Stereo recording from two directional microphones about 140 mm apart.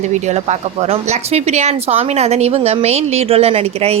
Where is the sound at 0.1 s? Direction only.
55° right (ahead or behind).